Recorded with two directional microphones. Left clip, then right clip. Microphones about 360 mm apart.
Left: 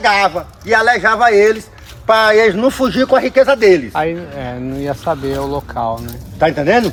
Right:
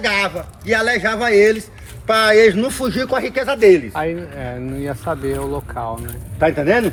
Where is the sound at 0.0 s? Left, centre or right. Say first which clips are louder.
Left 6 dB; centre.